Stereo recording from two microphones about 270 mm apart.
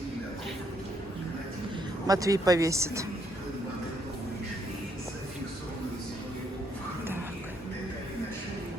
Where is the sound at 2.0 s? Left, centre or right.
Centre.